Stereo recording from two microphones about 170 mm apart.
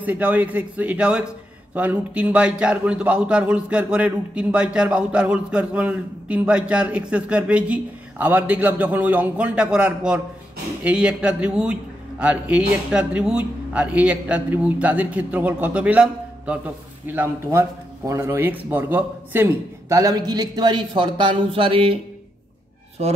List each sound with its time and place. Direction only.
0.0 s a man's voice: 10° right (ahead or behind); by 22.0 s 35° right (ahead or behind)